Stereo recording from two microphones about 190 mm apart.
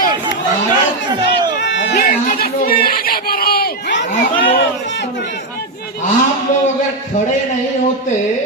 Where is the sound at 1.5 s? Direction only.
65° left (ahead or behind).